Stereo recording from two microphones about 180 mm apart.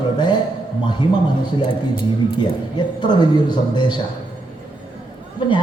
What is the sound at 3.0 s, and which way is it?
A man's voice, 25° left (ahead or behind).